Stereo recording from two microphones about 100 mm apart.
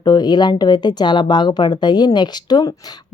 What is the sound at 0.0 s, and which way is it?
Speech, 45° left (ahead or behind).